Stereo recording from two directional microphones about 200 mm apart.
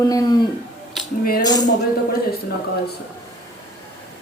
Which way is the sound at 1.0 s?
Centre (ahead or behind).